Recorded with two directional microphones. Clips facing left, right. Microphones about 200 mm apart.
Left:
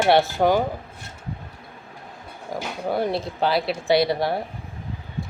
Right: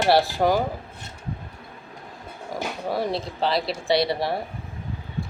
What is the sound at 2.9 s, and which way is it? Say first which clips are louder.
Speech: left 3 dB; centre (ahead or behind).